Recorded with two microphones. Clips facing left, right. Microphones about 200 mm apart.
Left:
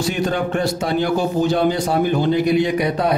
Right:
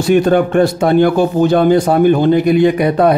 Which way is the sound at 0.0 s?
55° right (ahead or behind).